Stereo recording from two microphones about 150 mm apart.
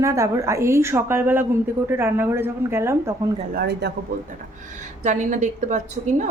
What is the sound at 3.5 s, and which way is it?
Speech, 90° right.